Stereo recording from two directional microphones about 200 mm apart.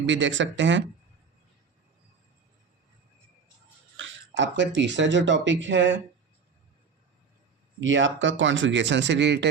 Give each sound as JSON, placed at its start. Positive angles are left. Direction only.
{"t": 0.0, "sound": "speech", "side_deg": -65}
{"t": 3.9, "sound": "speech", "side_deg": -70}
{"t": 7.8, "sound": "speech", "side_deg": -70}